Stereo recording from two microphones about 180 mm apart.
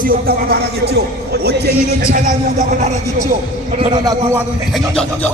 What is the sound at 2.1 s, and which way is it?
Speech, 50° right (ahead or behind).